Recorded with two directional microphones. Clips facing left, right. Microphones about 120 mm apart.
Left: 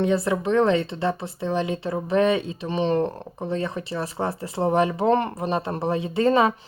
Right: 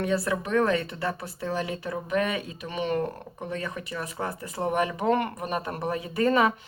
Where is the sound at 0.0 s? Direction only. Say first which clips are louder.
Left 5 dB; 25° left (ahead or behind).